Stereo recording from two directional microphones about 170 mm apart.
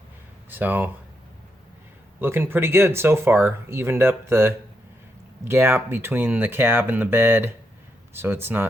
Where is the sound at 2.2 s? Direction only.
15° right (ahead or behind).